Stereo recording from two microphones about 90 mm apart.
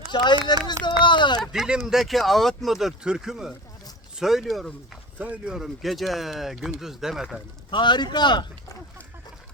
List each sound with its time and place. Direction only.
0.1 s speech: 55° left (ahead or behind)
1.4 s speech: 5° right (ahead or behind)
5.2 s speech: 15° right (ahead or behind)
5.5 s speech: centre (ahead or behind)
7.7 s speech: 60° left (ahead or behind)